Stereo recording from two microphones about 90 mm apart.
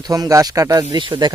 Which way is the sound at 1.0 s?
55° right (ahead or behind).